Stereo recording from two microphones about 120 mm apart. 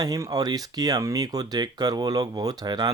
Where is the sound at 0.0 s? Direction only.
30° right (ahead or behind).